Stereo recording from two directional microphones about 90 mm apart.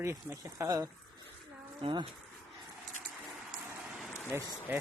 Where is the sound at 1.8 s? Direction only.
60° right (ahead or behind).